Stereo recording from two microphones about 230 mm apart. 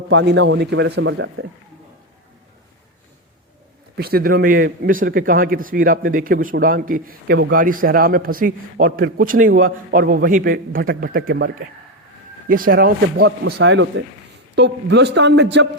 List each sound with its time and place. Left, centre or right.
0.1 s a man's voice: right
3.9 s a man's voice: right
13.2 s a man's voice: right